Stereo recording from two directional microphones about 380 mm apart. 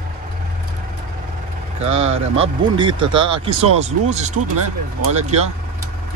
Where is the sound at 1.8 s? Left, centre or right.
Centre.